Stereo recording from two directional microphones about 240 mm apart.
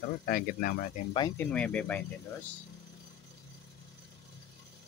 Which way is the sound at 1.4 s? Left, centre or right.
Centre.